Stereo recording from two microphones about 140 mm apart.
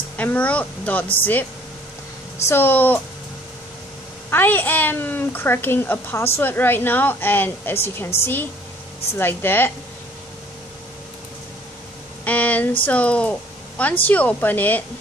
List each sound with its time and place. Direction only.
0.2 s a woman's voice: 10° left (ahead or behind)
2.4 s a woman's voice: 15° left (ahead or behind)
4.3 s a woman's voice: 15° left (ahead or behind)
12.3 s a sound: 10° left (ahead or behind)
12.8 s a woman's voice: 10° left (ahead or behind)